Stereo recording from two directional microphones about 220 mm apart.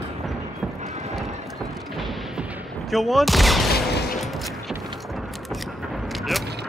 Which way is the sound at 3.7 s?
45° left (ahead or behind).